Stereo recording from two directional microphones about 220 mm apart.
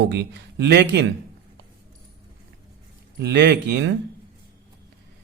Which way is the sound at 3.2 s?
50° right (ahead or behind).